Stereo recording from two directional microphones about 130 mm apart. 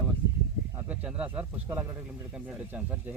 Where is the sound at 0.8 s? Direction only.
10° right (ahead or behind).